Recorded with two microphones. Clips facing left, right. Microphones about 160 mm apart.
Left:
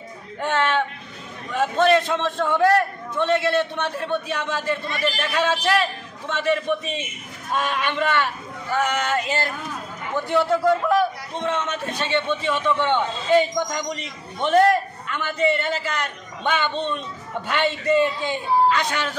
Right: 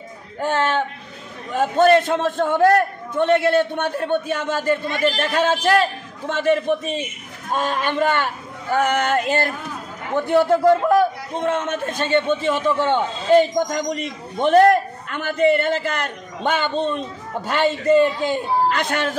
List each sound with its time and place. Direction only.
0.4 s a man's voice: 40° right (ahead or behind)